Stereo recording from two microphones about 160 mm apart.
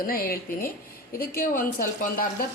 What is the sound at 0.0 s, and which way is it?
Speech, 65° left (ahead or behind).